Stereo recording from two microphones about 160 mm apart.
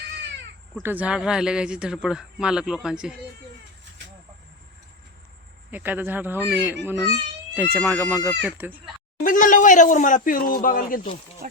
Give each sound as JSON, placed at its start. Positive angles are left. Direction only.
{"t": 0.8, "sound": "speech", "side_deg": -10}
{"t": 5.7, "sound": "speech", "side_deg": -10}
{"t": 9.2, "sound": "speech", "side_deg": 55}